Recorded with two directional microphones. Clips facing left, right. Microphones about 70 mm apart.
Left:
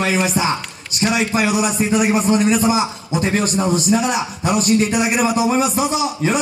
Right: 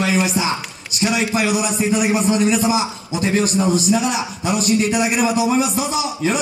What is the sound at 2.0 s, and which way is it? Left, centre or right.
A man's voice, left.